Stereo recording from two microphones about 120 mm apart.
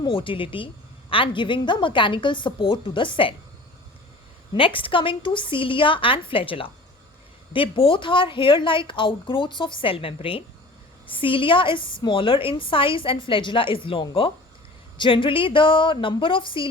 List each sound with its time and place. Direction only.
0.0 s a woman's voice: 45° left (ahead or behind)
4.5 s a woman's voice: 45° left (ahead or behind)